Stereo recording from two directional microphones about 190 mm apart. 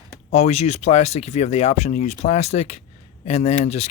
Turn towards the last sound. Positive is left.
turn(degrees=35)  # may be behind; listen again after turning